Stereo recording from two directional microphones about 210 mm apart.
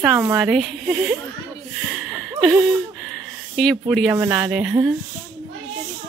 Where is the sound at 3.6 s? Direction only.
Centre (ahead or behind).